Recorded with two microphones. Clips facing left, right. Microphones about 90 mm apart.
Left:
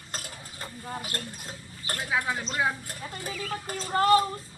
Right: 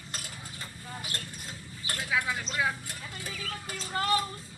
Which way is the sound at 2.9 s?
40° left (ahead or behind).